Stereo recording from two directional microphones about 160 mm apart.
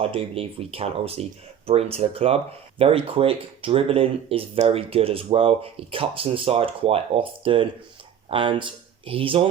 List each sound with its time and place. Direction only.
0.0 s speech: 35° right (ahead or behind)